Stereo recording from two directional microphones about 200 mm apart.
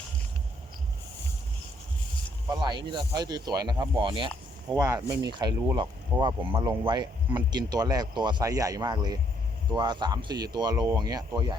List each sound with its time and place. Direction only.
2.5 s speech: 20° right (ahead or behind)
4.7 s speech: 15° right (ahead or behind)